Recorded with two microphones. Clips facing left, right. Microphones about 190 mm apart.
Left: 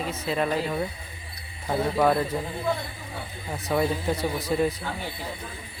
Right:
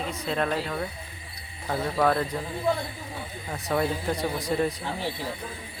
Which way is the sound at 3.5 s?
5° left (ahead or behind).